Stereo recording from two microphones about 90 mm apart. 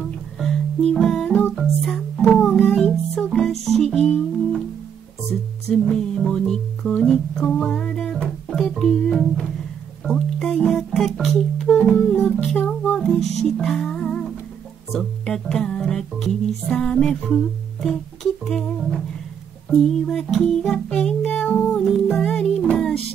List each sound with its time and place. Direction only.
0.4 s music: 5° left (ahead or behind)
5.9 s music: 5° left (ahead or behind)
10.0 s speech: 5° left (ahead or behind)
11.6 s music: 10° left (ahead or behind)
21.7 s music: 5° left (ahead or behind)